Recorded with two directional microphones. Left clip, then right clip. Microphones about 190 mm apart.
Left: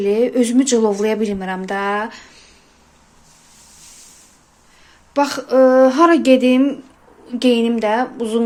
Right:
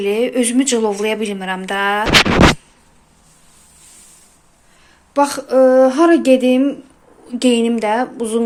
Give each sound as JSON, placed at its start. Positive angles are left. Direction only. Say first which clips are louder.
{"t": 0.0, "sound": "speech", "louder": "left 1 dB", "side_deg": 15}
{"t": 5.1, "sound": "speech", "louder": "right 1 dB", "side_deg": 0}
{"t": 7.3, "sound": "speech", "louder": "right 1 dB", "side_deg": -10}